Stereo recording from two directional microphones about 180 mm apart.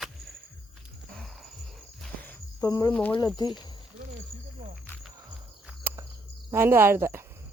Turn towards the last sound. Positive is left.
turn(degrees=-15)  # may be behind; listen again after turning